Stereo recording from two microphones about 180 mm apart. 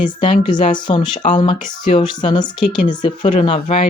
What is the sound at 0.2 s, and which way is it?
Speech, 25° left (ahead or behind).